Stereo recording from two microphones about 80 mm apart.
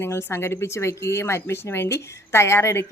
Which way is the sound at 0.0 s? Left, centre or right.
Left.